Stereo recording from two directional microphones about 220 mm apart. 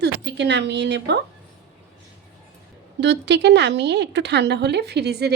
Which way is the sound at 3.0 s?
50° right (ahead or behind).